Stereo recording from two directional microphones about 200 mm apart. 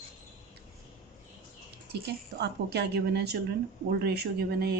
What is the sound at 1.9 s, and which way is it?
A woman's voice, 55° right (ahead or behind).